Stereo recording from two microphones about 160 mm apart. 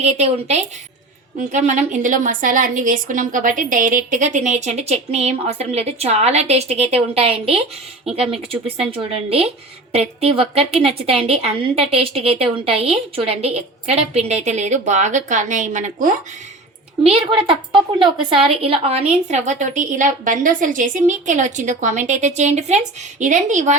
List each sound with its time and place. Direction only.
0.0 s a woman's voice: 45° right (ahead or behind)
17.0 s a woman's voice: 35° right (ahead or behind)